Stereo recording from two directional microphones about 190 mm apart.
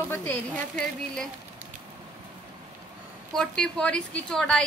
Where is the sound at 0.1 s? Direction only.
10° left (ahead or behind).